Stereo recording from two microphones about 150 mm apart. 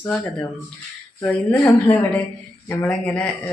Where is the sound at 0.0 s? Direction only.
10° left (ahead or behind).